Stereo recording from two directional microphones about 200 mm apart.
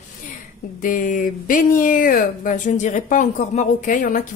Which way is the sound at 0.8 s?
40° left (ahead or behind).